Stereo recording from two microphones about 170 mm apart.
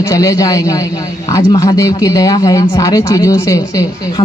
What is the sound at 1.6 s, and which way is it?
Speech, 20° left (ahead or behind).